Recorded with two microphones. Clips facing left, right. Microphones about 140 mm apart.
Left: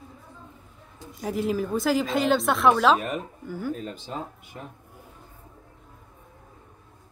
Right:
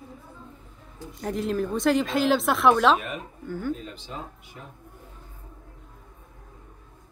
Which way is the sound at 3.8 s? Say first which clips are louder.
Left 4 dB; 45° left (ahead or behind).